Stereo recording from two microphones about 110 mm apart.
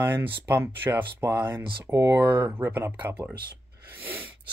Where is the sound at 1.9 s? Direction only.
30° right (ahead or behind).